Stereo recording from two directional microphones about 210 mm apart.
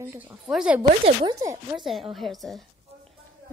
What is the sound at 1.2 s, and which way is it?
Speech, 20° right (ahead or behind).